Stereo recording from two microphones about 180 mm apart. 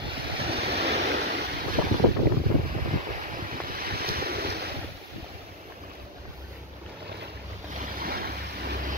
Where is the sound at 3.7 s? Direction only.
55° right (ahead or behind).